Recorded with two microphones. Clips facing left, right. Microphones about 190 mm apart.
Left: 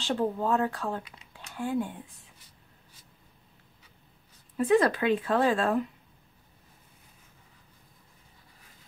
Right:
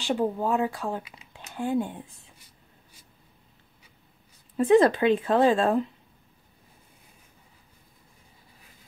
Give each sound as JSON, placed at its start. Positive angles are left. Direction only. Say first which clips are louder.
{"t": 0.0, "sound": "speech", "louder": "right 2 dB", "side_deg": -15}
{"t": 4.6, "sound": "a woman's voice", "louder": "right 5 dB", "side_deg": -25}